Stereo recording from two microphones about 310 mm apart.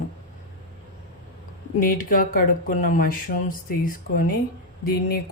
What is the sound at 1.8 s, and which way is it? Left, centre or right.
Speech, left.